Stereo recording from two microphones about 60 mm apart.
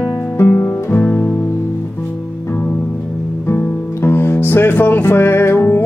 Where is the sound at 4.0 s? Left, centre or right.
Left.